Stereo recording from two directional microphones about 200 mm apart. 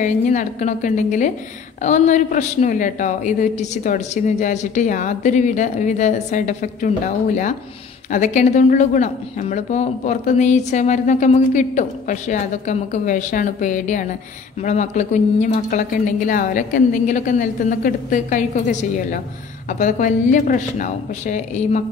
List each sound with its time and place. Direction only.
0.0 s speech: 40° left (ahead or behind)
8.1 s speech: 40° left (ahead or behind)